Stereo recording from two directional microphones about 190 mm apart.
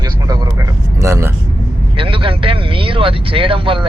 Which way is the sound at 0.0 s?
20° right (ahead or behind).